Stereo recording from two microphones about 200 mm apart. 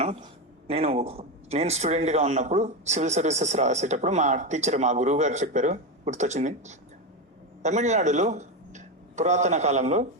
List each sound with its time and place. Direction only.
0.0 s a man's voice: 30° right (ahead or behind)